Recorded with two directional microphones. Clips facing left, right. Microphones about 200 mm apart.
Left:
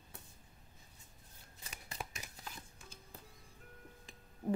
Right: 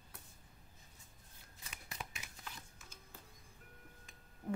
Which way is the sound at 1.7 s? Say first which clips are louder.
Left 3 dB; 40° left (ahead or behind).